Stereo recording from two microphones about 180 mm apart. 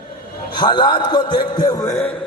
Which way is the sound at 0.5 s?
25° left (ahead or behind).